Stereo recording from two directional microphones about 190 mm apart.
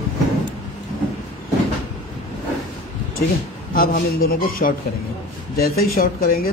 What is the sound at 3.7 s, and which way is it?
Speech, 50° left (ahead or behind).